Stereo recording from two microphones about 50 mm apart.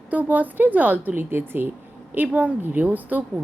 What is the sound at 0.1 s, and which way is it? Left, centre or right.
Speech, right.